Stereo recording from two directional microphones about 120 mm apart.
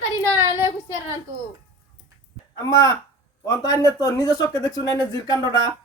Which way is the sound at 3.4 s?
30° left (ahead or behind).